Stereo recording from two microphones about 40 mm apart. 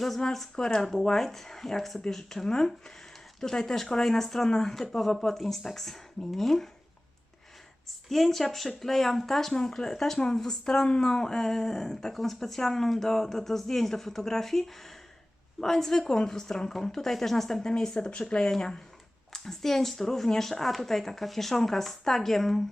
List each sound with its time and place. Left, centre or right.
0.5 s speech: centre
0.8 s speech: centre
8.1 s speech: centre
10.3 s speech: centre
18.4 s speech: centre